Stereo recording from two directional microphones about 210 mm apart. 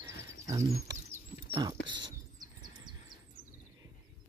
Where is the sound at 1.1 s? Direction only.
20° right (ahead or behind).